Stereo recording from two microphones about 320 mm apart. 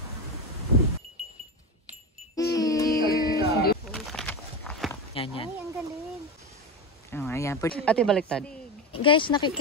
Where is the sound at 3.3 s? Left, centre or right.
Left.